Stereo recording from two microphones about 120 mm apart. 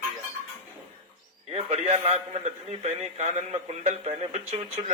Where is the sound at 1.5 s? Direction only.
60° right (ahead or behind).